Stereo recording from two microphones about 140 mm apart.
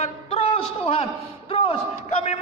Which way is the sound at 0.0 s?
45° left (ahead or behind).